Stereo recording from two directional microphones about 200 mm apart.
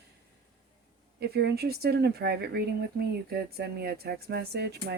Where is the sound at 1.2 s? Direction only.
55° right (ahead or behind).